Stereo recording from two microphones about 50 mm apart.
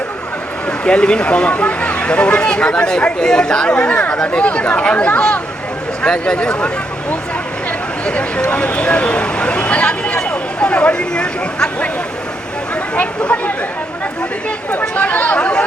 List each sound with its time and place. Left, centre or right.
0.9 s speech: centre
8.0 s speech: left
13.0 s speech: left
14.7 s speech: left